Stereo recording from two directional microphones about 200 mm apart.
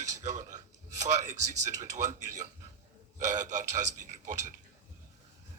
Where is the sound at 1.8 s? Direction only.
40° right (ahead or behind).